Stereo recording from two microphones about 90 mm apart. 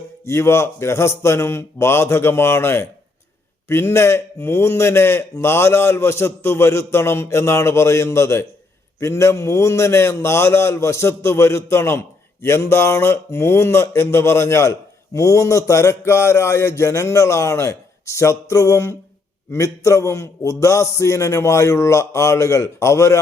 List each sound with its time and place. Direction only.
0.3 s a man's voice: 30° left (ahead or behind)